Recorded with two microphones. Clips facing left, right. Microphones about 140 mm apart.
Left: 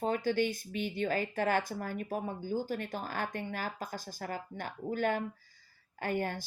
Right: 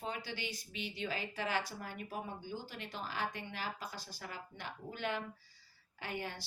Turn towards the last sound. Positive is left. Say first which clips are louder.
# left 9 dB
turn(degrees=50)  # may be behind; listen again after turning